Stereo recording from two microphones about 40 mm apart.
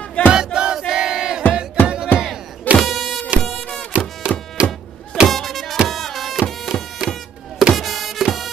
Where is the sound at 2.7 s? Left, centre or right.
Centre.